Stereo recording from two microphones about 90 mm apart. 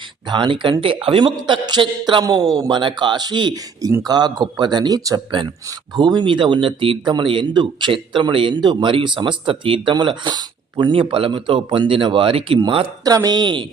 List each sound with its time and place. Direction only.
0.3 s speech: 65° right (ahead or behind)
2.2 s speech: 50° right (ahead or behind)
2.6 s speech: 60° right (ahead or behind)
3.5 s speech: 40° right (ahead or behind)
6.0 s speech: 55° right (ahead or behind)
10.9 s speech: 75° right (ahead or behind)
12.5 s speech: 65° right (ahead or behind)
13.1 s speech: 45° right (ahead or behind)